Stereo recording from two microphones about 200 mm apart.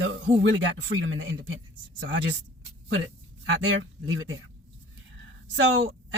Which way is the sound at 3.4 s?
70° right (ahead or behind).